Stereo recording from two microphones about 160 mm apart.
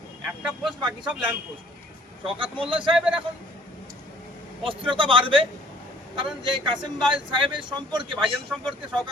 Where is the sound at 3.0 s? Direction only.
5° right (ahead or behind).